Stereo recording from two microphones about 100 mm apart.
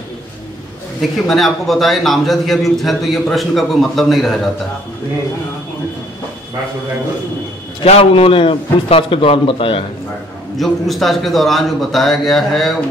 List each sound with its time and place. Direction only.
1.2 s a man's voice: centre (ahead or behind)
7.8 s a man's voice: 75° left (ahead or behind)
10.6 s a man's voice: centre (ahead or behind)